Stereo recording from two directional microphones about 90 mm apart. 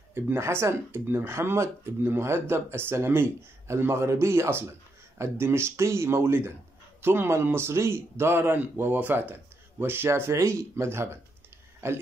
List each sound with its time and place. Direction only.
0.1 s speech: 25° right (ahead or behind)